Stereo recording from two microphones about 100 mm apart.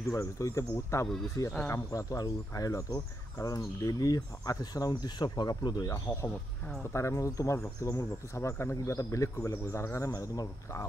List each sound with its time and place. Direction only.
0.1 s speech: 30° left (ahead or behind)
6.1 s speech: 20° left (ahead or behind)